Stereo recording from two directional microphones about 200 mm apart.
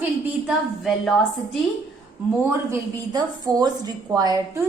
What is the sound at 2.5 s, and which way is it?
A woman's voice, 15° right (ahead or behind).